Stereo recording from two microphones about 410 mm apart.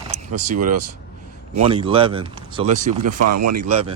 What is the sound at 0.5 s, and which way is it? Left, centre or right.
Speech, centre.